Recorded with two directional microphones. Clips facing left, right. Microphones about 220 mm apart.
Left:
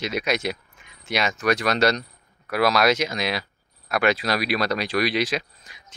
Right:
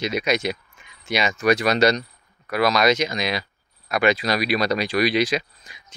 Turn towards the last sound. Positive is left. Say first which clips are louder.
# right 3 dB
turn(degrees=0)  # may be behind; listen again after turning